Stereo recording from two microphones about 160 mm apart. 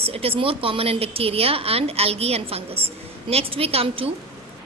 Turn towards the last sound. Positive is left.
turn(degrees=-35)  # may be behind; listen again after turning